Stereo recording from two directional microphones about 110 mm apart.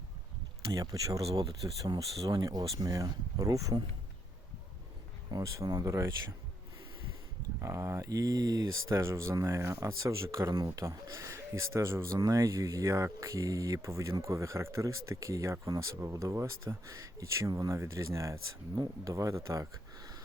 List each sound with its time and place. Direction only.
0.7 s speech: 35° right (ahead or behind)
5.3 s speech: 35° right (ahead or behind)
7.6 s speech: 25° right (ahead or behind)